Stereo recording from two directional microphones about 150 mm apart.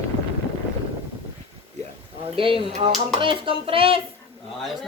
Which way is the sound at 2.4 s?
35° right (ahead or behind).